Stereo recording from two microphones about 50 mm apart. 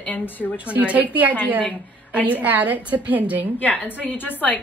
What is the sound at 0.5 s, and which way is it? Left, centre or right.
A woman's voice, right.